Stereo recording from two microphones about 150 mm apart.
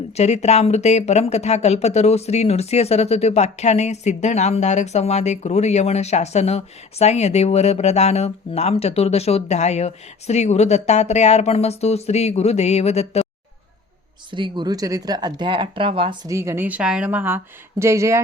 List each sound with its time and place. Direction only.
0.2 s speech: 45° left (ahead or behind)
14.3 s speech: 30° right (ahead or behind)
16.3 s a woman's voice: 20° right (ahead or behind)